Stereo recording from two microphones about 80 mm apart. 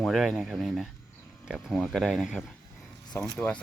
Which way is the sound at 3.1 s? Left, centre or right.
Left.